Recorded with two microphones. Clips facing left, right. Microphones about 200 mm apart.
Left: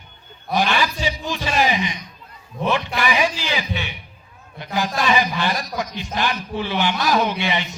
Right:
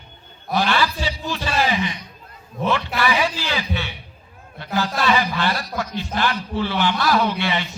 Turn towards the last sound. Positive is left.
turn(degrees=15)  # may be behind; listen again after turning